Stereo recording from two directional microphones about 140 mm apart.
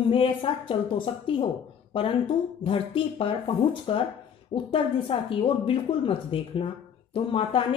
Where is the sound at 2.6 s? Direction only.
40° left (ahead or behind).